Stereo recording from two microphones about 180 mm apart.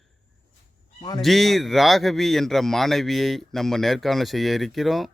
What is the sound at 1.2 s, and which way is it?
Speech, centre (ahead or behind).